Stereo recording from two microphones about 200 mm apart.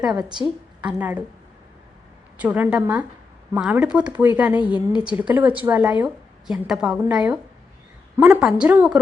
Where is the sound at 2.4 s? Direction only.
10° right (ahead or behind).